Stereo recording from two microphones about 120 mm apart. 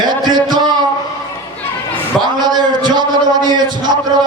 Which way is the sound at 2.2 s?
35° right (ahead or behind).